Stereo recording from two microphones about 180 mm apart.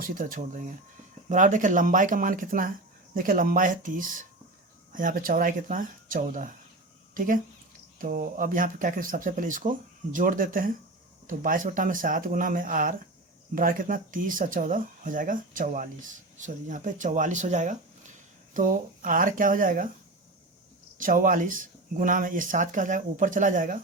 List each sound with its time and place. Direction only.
0.0 s speech: 50° right (ahead or behind)
21.0 s speech: 50° right (ahead or behind)